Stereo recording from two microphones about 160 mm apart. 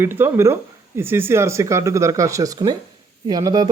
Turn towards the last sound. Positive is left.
turn(degrees=-25)  # may be behind; listen again after turning